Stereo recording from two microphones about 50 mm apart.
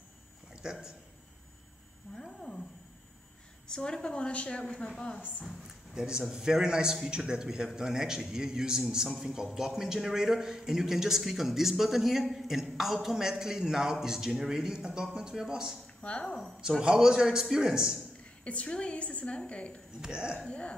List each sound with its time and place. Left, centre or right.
0.6 s a man's voice: centre
2.1 s a woman's voice: centre
3.6 s a woman's voice: centre
5.9 s a man's voice: centre
16.0 s a woman's voice: centre
16.8 s a man's voice: centre
18.4 s a woman's voice: left
20.0 s a man's voice: centre
20.3 s a woman's voice: left